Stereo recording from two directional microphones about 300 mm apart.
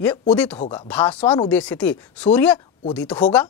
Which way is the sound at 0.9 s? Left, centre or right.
Centre.